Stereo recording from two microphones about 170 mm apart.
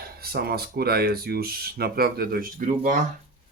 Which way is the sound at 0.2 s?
65° right (ahead or behind).